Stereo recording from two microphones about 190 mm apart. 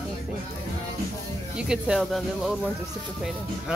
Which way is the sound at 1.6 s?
5° right (ahead or behind).